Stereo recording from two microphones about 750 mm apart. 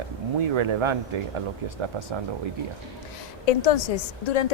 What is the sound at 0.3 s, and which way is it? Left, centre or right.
Speech, right.